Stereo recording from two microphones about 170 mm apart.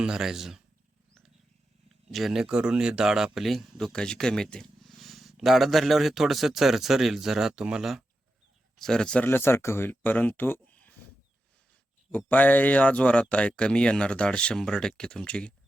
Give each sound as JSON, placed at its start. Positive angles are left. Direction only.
{"t": 0.0, "sound": "speech", "side_deg": -5}
{"t": 2.0, "sound": "speech", "side_deg": 0}
{"t": 12.1, "sound": "speech", "side_deg": 10}